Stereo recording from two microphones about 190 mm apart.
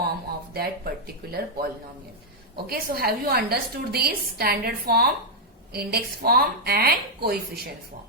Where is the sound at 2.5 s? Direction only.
55° right (ahead or behind).